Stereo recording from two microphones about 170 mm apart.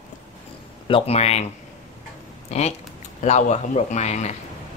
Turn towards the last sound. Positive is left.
turn(degrees=40)  # may be behind; listen again after turning